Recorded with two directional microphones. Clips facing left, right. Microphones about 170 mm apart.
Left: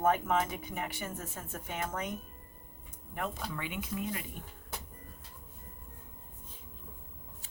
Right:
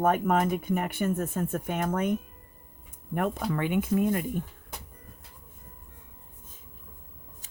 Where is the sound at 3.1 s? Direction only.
55° right (ahead or behind).